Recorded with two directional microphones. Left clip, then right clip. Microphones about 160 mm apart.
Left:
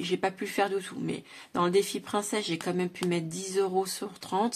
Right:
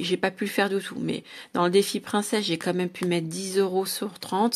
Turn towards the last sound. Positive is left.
turn(degrees=-30)  # may be behind; listen again after turning